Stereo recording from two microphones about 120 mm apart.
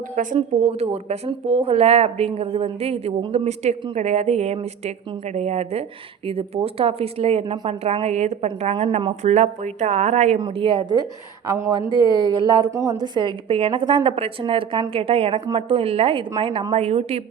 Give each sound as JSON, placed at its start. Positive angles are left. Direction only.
{"t": 0.2, "sound": "speech", "side_deg": -75}
{"t": 6.2, "sound": "a woman's voice", "side_deg": -50}
{"t": 7.5, "sound": "speech", "side_deg": -40}
{"t": 7.9, "sound": "speech", "side_deg": -60}
{"t": 8.7, "sound": "a woman's voice", "side_deg": -50}
{"t": 9.2, "sound": "speech", "side_deg": -70}
{"t": 10.4, "sound": "a woman's voice", "side_deg": -45}
{"t": 12.0, "sound": "a woman's voice", "side_deg": -40}
{"t": 13.1, "sound": "a woman's voice", "side_deg": -45}
{"t": 16.8, "sound": "speech", "side_deg": -60}